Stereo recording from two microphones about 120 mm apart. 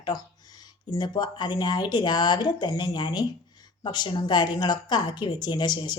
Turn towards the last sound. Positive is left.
turn(degrees=35)  # may be behind; listen again after turning